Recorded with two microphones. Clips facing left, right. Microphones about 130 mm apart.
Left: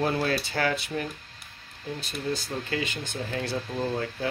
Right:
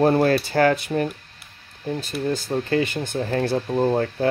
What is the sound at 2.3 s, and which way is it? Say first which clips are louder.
Speech: right 10 dB; 50° right (ahead or behind).